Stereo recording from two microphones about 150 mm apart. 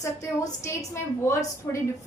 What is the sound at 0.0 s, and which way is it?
A woman's voice, 20° left (ahead or behind).